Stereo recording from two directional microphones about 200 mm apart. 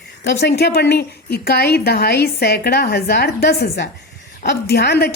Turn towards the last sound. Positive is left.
turn(degrees=55)  # may be behind; listen again after turning